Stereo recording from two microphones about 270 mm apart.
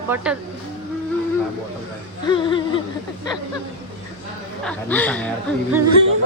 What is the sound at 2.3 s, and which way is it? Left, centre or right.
Speech, centre.